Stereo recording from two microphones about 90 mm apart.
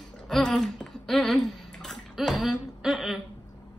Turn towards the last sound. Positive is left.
turn(degrees=-5)  # may be behind; listen again after turning